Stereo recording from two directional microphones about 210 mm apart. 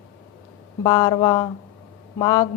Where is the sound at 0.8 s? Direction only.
20° left (ahead or behind).